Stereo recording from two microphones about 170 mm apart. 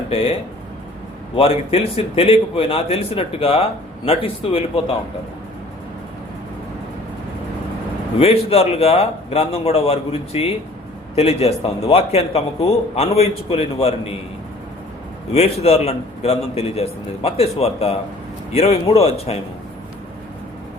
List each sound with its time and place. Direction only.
0.1 s a man's voice: 35° left (ahead or behind)
1.4 s a man's voice: 35° left (ahead or behind)
8.2 s a man's voice: 35° left (ahead or behind)
15.3 s a man's voice: 40° left (ahead or behind)